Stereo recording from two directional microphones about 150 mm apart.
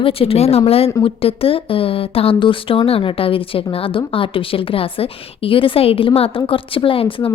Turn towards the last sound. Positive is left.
turn(degrees=35)  # may be behind; listen again after turning